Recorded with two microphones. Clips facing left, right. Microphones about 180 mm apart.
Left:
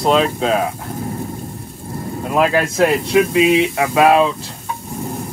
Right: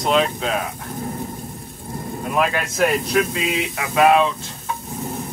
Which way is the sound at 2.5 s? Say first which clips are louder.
Left 5 dB; 35° left (ahead or behind).